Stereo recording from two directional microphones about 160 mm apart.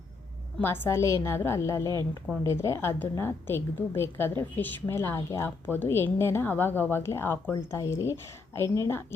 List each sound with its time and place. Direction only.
0.6 s a woman's voice: 15° left (ahead or behind)